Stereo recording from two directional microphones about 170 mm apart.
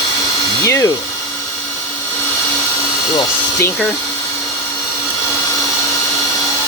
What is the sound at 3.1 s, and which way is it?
Speech, 15° left (ahead or behind).